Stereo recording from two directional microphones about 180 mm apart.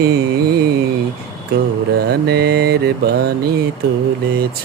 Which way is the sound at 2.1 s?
60° right (ahead or behind).